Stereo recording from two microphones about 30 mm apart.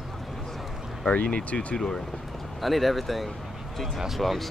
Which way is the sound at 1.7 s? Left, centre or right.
Left.